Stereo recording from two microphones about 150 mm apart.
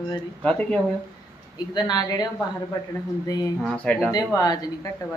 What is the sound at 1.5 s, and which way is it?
A man's voice, 30° left (ahead or behind).